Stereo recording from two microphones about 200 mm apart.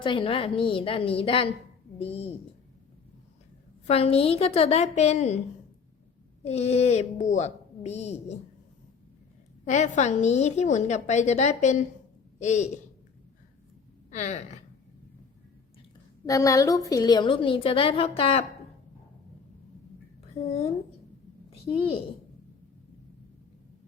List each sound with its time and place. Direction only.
0.0 s a woman's voice: 25° left (ahead or behind)
3.8 s a woman's voice: 30° left (ahead or behind)
6.4 s a woman's voice: 35° left (ahead or behind)
9.6 s a woman's voice: 35° left (ahead or behind)
14.1 s a woman's voice: 35° left (ahead or behind)
16.2 s a woman's voice: 15° left (ahead or behind)
21.7 s a woman's voice: 30° left (ahead or behind)